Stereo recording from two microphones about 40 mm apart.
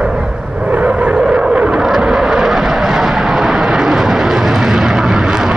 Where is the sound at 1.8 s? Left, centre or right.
Centre.